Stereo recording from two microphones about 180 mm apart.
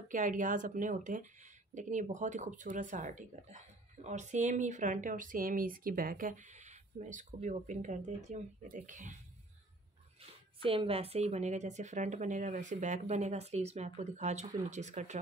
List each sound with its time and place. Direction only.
0.1 s speech: 45° right (ahead or behind)
10.6 s speech: 30° right (ahead or behind)